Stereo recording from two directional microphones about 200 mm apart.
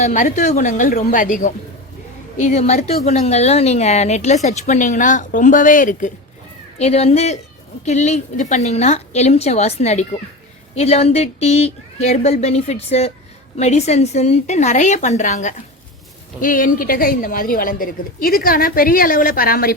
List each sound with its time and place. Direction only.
0.0 s a woman's voice: 40° left (ahead or behind)